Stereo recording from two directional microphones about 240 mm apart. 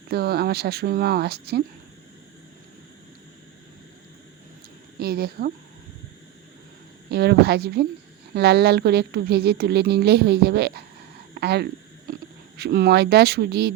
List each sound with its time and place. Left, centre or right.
0.1 s speech: right
4.9 s speech: right
7.1 s a woman's voice: right